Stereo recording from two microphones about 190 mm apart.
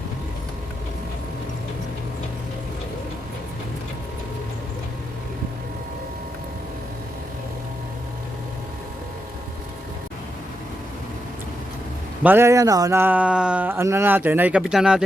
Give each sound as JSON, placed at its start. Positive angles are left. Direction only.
{"t": 12.2, "sound": "speech", "side_deg": -10}